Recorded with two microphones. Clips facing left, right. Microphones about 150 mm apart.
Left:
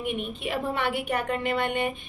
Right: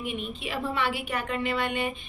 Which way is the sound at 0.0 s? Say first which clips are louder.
Left 3 dB; 55° left (ahead or behind).